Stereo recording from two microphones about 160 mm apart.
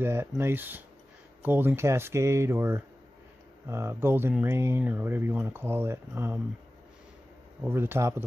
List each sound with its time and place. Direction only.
0.0 s speech: 15° right (ahead or behind)
7.6 s speech: 15° right (ahead or behind)